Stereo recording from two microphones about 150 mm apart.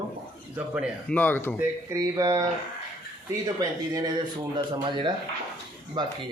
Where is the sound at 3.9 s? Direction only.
25° right (ahead or behind).